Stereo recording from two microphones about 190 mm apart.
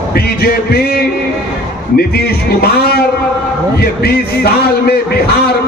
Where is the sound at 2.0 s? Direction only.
55° left (ahead or behind).